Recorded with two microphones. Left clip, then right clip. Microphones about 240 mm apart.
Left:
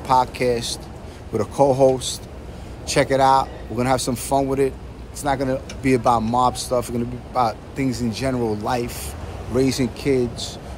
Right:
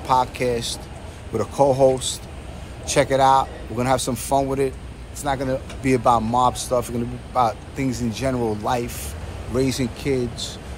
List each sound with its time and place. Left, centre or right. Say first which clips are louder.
0.0 s a man's voice: left 2 dB; centre